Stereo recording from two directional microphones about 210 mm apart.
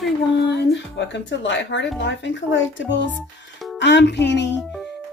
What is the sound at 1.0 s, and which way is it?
Speech, 60° left (ahead or behind).